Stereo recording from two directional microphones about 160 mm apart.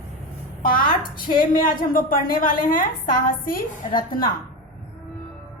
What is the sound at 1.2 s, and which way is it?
A woman's voice, 60° left (ahead or behind).